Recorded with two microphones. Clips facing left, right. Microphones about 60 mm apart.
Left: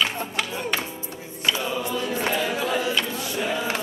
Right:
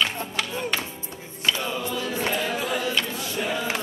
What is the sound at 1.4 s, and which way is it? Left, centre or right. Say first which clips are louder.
Choir: left 1 dB; centre.